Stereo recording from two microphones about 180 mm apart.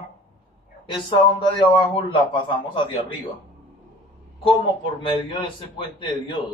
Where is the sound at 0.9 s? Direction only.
25° left (ahead or behind).